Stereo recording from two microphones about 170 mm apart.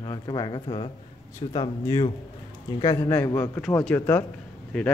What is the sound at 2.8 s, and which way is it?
A man's voice, 20° left (ahead or behind).